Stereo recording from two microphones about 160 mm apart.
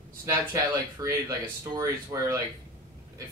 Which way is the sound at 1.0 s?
20° right (ahead or behind).